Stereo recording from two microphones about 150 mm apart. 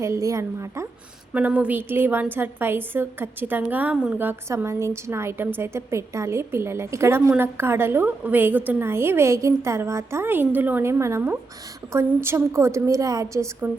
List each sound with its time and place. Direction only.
0.0 s a woman's voice: 20° right (ahead or behind)
1.3 s a woman's voice: 10° right (ahead or behind)